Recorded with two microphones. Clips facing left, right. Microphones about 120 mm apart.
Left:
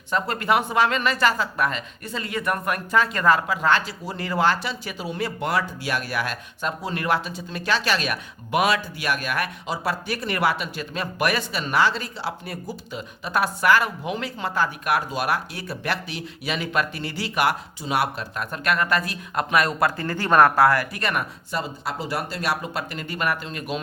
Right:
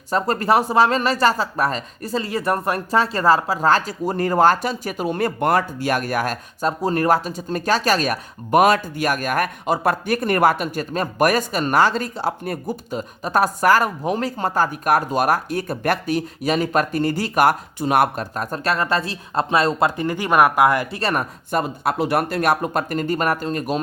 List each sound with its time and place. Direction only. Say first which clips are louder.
0.1 s speech: right 4 dB; 35° right (ahead or behind); by 21.0 s 20° right (ahead or behind)
21.0 s speech: right 4 dB; 35° right (ahead or behind)
21.5 s speech: right 8 dB; 55° right (ahead or behind)